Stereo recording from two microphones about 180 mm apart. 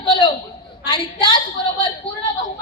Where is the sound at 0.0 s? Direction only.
25° left (ahead or behind).